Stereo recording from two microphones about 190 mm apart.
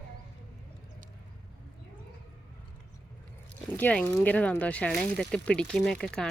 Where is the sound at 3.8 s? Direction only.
10° left (ahead or behind).